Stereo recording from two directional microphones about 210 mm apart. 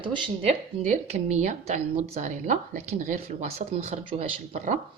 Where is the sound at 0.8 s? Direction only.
35° right (ahead or behind).